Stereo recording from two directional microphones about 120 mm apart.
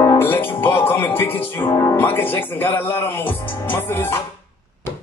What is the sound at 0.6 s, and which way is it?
Speech, 15° left (ahead or behind).